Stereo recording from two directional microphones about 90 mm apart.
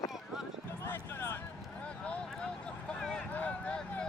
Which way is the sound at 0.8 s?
25° left (ahead or behind).